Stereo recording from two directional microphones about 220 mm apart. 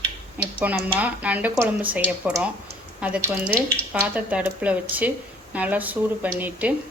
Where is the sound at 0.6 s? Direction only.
5° right (ahead or behind).